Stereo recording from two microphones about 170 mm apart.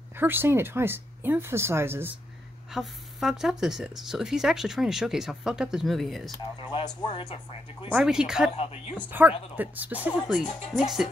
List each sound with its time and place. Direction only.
0.2 s speech: 10° right (ahead or behind)
2.7 s speech: centre (ahead or behind)
7.0 s speech: 30° left (ahead or behind)
7.9 s speech: 5° right (ahead or behind)
8.5 s speech: 40° left (ahead or behind)
9.1 s speech: 10° right (ahead or behind)
10.4 s speech: 35° left (ahead or behind)